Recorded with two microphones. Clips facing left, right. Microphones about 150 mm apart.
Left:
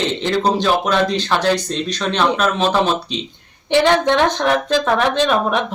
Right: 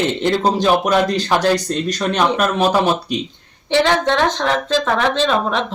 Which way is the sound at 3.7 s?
15° left (ahead or behind).